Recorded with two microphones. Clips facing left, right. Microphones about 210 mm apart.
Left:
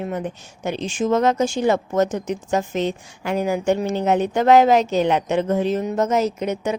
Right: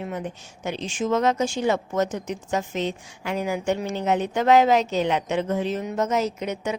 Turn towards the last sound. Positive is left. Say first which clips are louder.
# left 4 dB
turn(degrees=45)  # may be behind; listen again after turning